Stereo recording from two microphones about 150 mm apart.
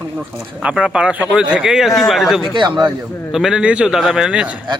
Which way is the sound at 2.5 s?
30° right (ahead or behind).